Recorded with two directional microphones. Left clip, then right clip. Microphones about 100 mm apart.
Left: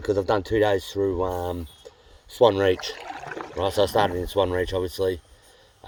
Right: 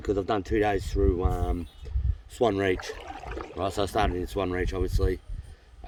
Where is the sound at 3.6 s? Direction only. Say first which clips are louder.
Left 6 dB; 40° right (ahead or behind).